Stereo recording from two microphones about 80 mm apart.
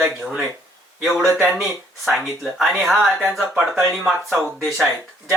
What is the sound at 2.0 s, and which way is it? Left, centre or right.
Speech, centre.